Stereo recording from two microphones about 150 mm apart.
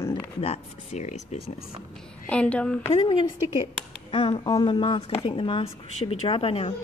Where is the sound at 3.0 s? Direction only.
30° left (ahead or behind).